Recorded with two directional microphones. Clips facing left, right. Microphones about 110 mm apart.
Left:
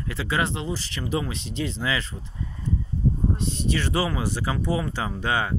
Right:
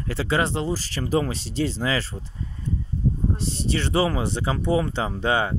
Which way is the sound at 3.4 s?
30° right (ahead or behind).